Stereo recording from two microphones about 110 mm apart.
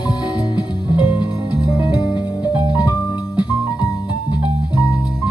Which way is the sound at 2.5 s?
40° left (ahead or behind).